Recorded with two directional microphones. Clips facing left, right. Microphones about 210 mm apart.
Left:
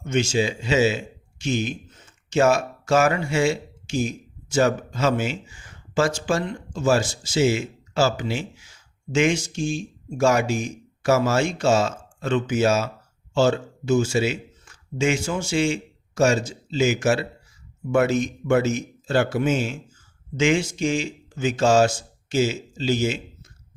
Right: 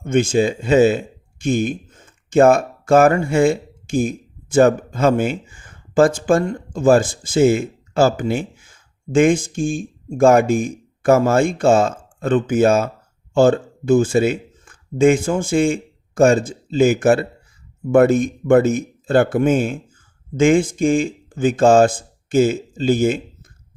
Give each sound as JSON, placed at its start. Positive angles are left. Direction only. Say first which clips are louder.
{"t": 0.0, "sound": "a man's voice", "louder": "right 6 dB", "side_deg": -55}